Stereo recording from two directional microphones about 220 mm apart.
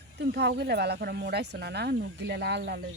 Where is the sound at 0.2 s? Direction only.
50° right (ahead or behind).